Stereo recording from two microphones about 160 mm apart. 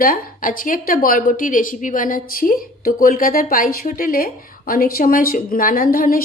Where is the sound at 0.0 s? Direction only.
65° left (ahead or behind).